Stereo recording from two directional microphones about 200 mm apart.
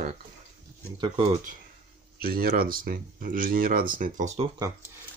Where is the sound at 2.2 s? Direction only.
50° right (ahead or behind).